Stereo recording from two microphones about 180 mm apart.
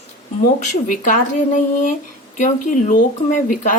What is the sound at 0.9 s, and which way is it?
Speech, 45° left (ahead or behind).